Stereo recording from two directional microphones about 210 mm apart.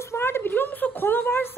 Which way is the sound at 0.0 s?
10° left (ahead or behind).